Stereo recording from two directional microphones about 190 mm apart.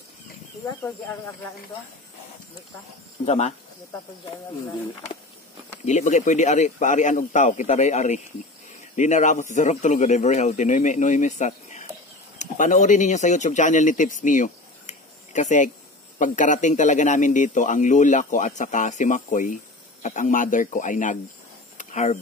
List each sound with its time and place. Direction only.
3.3 s speech: 35° left (ahead or behind)
5.9 s speech: 40° left (ahead or behind)
21.7 s a sound: 40° left (ahead or behind)